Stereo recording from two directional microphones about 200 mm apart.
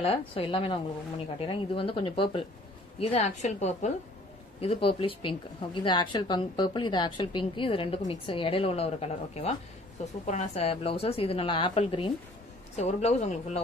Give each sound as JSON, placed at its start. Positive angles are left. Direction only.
{"t": 0.0, "sound": "a woman's voice", "side_deg": 30}